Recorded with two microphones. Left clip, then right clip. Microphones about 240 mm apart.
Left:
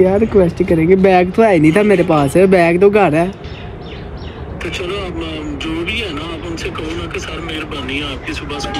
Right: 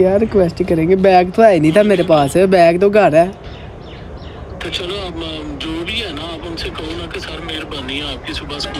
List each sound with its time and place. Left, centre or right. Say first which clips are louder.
0.0 s speech: left 1 dB; right
4.6 s vehicle: left 1 dB; right